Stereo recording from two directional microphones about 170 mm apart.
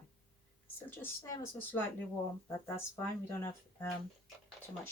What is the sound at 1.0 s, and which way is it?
Speech, 15° left (ahead or behind).